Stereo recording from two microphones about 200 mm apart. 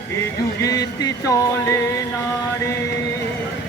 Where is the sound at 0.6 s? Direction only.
20° left (ahead or behind).